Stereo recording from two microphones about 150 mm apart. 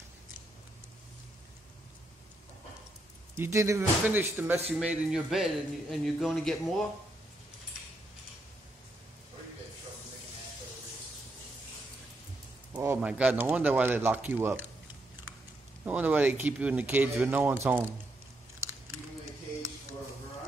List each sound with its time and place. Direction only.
3.3 s speech: 20° right (ahead or behind)
4.6 s a man's voice: centre (ahead or behind)
12.7 s speech: 10° right (ahead or behind)
15.8 s speech: 10° right (ahead or behind)